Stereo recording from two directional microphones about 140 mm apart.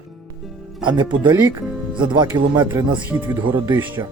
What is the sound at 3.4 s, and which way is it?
Speech, 35° right (ahead or behind).